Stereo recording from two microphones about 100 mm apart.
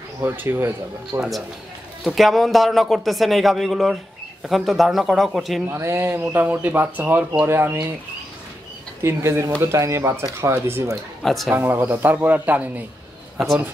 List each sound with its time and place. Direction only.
0.2 s speech: 20° right (ahead or behind)
1.1 s a man's voice: 35° right (ahead or behind)
2.0 s a man's voice: centre (ahead or behind)
5.7 s speech: 25° right (ahead or behind)
9.0 s speech: 30° right (ahead or behind)
11.2 s a man's voice: centre (ahead or behind)
11.5 s a man's voice: 20° right (ahead or behind)